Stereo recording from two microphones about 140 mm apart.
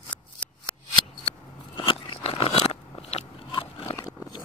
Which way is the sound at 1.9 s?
40° left (ahead or behind).